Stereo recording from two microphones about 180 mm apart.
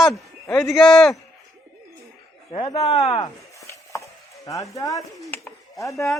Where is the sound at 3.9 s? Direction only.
15° left (ahead or behind).